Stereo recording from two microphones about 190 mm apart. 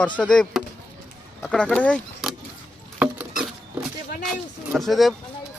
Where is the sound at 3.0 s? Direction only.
5° right (ahead or behind).